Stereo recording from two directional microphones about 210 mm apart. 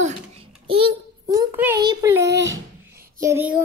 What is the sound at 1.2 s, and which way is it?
Speech, 15° right (ahead or behind).